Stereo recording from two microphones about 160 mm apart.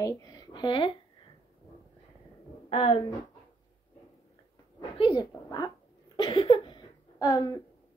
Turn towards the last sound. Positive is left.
turn(degrees=20)  # may be behind; listen again after turning